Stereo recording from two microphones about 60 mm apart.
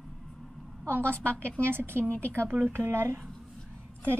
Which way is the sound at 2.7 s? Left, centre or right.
Right.